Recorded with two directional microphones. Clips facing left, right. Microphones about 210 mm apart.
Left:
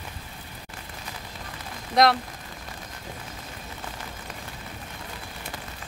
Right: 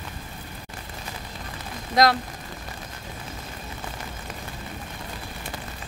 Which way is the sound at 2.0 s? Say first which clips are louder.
Even; centre (ahead or behind).